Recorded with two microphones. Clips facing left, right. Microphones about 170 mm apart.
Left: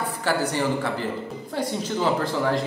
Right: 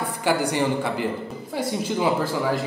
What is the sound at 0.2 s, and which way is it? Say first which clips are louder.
A man's voice: right 2 dB; 15° right (ahead or behind).